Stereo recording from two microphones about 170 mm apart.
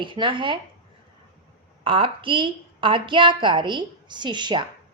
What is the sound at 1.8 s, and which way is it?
A woman's voice, 30° right (ahead or behind).